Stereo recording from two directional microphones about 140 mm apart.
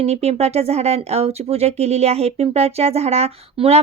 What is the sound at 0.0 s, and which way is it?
Speech, 50° right (ahead or behind).